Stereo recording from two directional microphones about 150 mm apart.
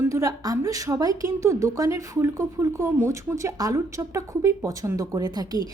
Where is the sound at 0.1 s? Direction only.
20° right (ahead or behind).